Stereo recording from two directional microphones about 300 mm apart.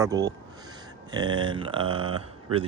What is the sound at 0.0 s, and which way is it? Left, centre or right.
Speech, centre.